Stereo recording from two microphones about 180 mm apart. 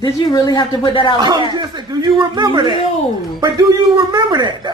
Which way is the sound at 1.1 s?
25° right (ahead or behind).